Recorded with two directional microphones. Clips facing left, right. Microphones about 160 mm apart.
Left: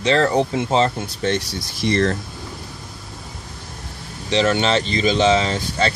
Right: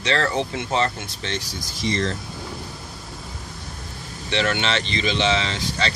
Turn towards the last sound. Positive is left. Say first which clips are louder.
# left 5 dB
turn(degrees=45)  # may be behind; listen again after turning